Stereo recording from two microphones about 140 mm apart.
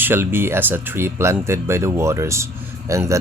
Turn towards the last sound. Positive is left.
turn(degrees=-20)  # may be behind; listen again after turning